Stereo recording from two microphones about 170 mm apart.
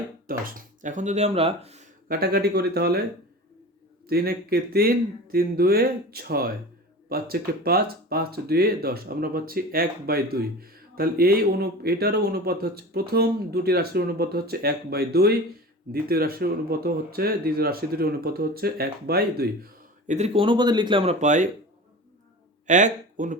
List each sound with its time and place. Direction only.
0.3 s speech: 55° right (ahead or behind); by 1.9 s 40° right (ahead or behind)
2.0 s speech: 60° right (ahead or behind)
4.1 s speech: 65° right (ahead or behind)
20.1 s speech: 40° right (ahead or behind)
22.6 s speech: 45° right (ahead or behind)